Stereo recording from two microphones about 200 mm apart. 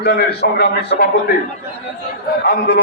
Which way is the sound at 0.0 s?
50° left (ahead or behind).